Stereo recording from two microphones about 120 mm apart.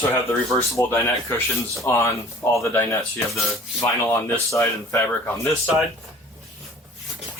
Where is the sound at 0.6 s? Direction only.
20° left (ahead or behind).